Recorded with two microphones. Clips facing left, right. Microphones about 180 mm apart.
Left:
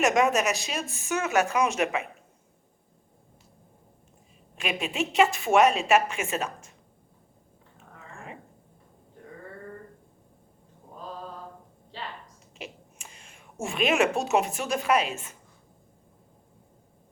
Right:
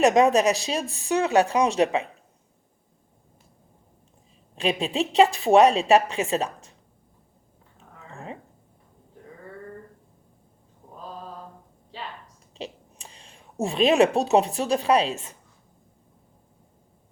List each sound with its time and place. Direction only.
0.0 s speech: 35° right (ahead or behind)
4.5 s speech: 35° right (ahead or behind)
8.1 s dog: 35° right (ahead or behind)
12.5 s speech: 35° right (ahead or behind)